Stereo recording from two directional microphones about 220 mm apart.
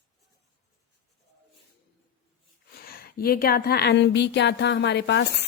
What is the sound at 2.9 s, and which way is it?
Speech, 40° left (ahead or behind).